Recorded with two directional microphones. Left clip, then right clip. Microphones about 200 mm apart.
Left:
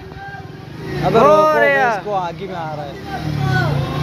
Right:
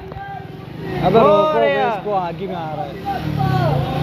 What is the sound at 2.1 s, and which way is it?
Speech, 20° right (ahead or behind).